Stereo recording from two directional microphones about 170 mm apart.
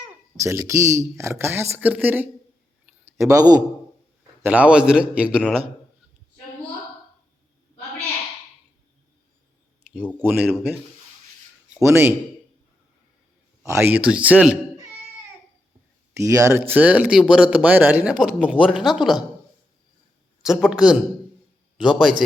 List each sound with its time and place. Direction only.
0.4 s a man's voice: 15° right (ahead or behind)
4.4 s speech: 10° right (ahead or behind)
10.2 s a man's voice: 10° right (ahead or behind)
13.7 s speech: 15° right (ahead or behind)
16.1 s speech: 20° right (ahead or behind); by 19.2 s centre (ahead or behind)
20.4 s speech: 5° right (ahead or behind)